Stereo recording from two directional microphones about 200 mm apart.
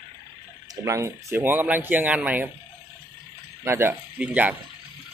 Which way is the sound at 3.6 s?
10° right (ahead or behind).